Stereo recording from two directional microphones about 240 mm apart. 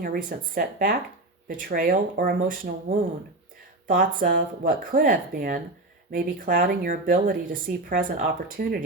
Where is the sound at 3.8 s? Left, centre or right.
Right.